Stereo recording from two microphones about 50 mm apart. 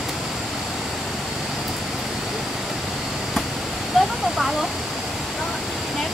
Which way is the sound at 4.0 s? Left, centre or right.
Centre.